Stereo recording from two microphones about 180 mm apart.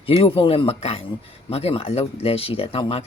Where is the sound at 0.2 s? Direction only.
30° left (ahead or behind).